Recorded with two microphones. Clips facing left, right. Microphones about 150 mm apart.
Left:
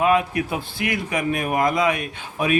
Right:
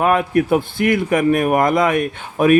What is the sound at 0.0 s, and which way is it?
A man's voice, 50° right (ahead or behind).